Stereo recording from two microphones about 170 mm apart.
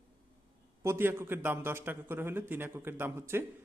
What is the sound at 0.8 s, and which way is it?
Speech, 15° right (ahead or behind).